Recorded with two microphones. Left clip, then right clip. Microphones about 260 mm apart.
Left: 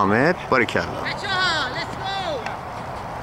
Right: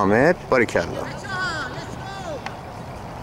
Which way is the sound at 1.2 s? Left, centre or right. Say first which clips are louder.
Left 6 dB; left.